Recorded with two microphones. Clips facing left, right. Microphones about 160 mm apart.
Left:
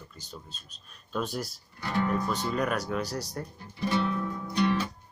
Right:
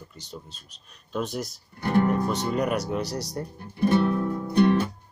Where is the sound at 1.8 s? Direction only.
55° right (ahead or behind).